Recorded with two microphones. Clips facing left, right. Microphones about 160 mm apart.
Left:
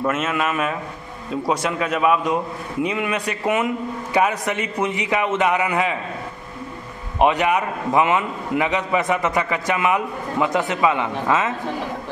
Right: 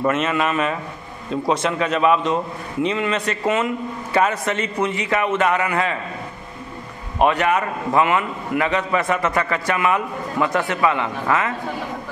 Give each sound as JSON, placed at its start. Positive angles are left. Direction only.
{"t": 0.0, "sound": "a man's voice", "side_deg": 5}
{"t": 7.2, "sound": "a man's voice", "side_deg": 15}